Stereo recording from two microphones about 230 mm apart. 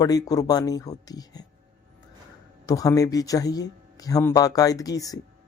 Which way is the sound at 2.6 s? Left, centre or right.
Centre.